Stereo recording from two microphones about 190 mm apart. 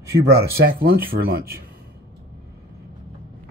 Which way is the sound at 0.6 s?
50° right (ahead or behind).